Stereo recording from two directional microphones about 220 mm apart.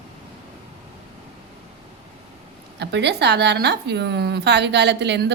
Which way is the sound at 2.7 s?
50° right (ahead or behind).